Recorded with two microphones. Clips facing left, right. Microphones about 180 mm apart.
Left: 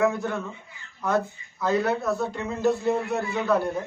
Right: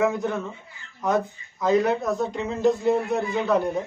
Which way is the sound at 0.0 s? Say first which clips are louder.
Right 1 dB; 20° right (ahead or behind).